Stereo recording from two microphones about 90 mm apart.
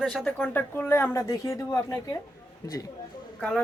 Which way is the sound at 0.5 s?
20° left (ahead or behind).